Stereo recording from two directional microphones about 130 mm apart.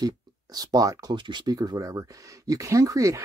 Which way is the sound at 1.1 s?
35° right (ahead or behind).